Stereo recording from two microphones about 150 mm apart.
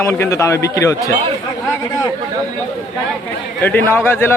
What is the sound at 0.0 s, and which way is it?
Speech, 20° left (ahead or behind).